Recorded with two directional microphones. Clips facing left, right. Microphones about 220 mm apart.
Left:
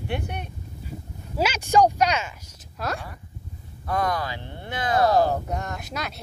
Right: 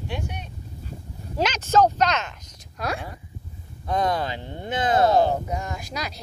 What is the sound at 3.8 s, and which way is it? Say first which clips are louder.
Speech: right 2 dB; 25° right (ahead or behind).